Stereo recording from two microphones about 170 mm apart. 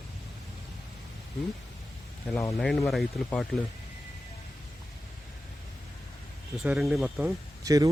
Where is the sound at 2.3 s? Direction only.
15° left (ahead or behind).